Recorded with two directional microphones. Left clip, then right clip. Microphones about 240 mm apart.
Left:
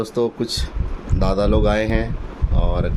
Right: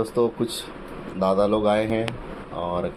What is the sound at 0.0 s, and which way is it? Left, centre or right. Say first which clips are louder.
Speech: left 1 dB; left.